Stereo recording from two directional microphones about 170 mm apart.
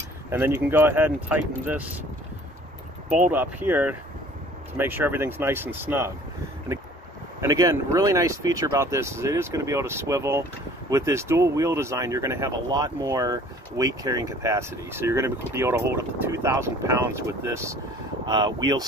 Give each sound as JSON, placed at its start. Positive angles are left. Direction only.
{"t": 0.3, "sound": "speech", "side_deg": -10}
{"t": 3.1, "sound": "speech", "side_deg": -10}
{"t": 7.3, "sound": "speech", "side_deg": -20}